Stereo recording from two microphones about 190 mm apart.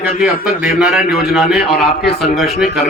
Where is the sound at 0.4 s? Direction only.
5° right (ahead or behind).